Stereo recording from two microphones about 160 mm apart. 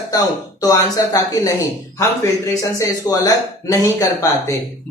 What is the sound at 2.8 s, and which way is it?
Speech, 20° left (ahead or behind).